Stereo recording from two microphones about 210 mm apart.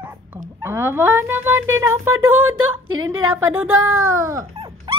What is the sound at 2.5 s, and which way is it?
Speech, 75° right (ahead or behind).